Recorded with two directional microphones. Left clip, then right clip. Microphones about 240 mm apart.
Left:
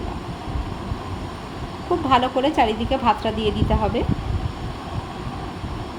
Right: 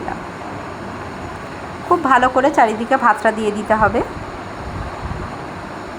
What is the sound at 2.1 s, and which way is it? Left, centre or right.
A woman's voice, right.